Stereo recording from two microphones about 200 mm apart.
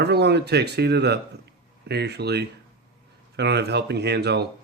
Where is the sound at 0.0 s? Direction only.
55° right (ahead or behind).